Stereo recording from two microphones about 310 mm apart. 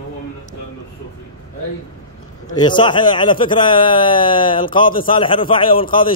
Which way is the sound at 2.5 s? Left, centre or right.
Centre.